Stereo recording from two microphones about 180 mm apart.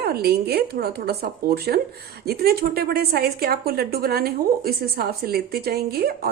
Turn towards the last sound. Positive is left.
turn(degrees=-60)  # may be behind; listen again after turning